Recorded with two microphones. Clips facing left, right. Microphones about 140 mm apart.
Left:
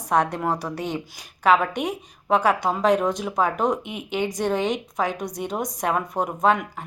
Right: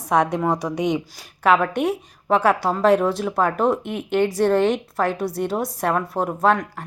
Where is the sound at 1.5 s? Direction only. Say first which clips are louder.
Right 3 dB; 10° left (ahead or behind).